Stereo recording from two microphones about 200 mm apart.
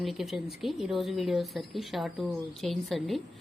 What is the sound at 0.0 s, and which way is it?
A woman's voice, centre (ahead or behind).